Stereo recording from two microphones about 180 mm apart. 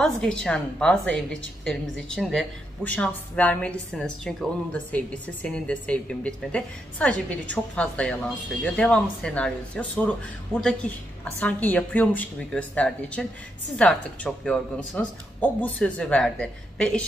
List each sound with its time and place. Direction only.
0.0 s a woman's voice: 5° left (ahead or behind)